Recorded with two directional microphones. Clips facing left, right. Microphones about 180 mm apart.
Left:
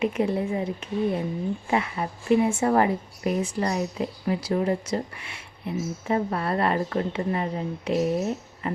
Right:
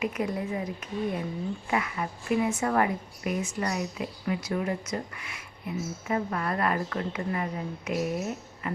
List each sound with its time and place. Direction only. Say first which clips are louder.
0.0 s a woman's voice: left 5 dB; 25° left (ahead or behind)